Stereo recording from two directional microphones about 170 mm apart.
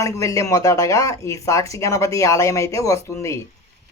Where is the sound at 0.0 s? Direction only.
20° left (ahead or behind).